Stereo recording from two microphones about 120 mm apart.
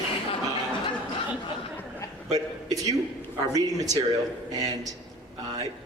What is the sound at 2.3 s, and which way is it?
A man's voice, 30° right (ahead or behind).